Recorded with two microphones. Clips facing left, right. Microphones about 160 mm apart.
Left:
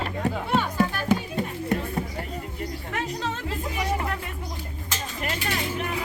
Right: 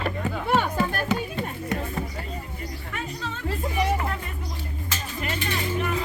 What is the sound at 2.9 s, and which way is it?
Music, 90° left.